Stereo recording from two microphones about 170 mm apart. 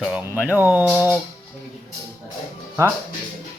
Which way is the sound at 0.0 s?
10° right (ahead or behind).